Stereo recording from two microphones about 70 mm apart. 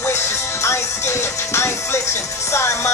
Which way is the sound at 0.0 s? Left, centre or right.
Left.